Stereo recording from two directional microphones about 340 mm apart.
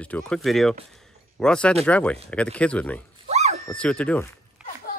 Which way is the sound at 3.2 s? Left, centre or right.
Centre.